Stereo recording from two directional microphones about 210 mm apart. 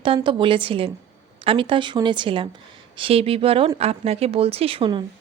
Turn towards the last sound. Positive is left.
turn(degrees=-25)  # may be behind; listen again after turning